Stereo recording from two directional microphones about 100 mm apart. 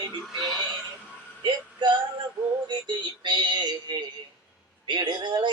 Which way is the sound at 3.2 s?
50° right (ahead or behind).